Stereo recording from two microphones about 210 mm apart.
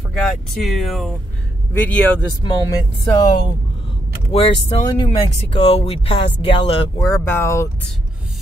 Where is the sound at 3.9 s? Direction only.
25° left (ahead or behind).